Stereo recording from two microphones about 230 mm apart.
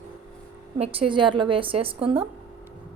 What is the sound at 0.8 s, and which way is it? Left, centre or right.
A woman's voice, right.